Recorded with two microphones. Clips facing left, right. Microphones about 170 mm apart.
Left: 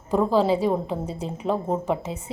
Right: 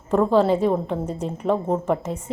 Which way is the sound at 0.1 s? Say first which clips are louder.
Right 2 dB; 5° left (ahead or behind).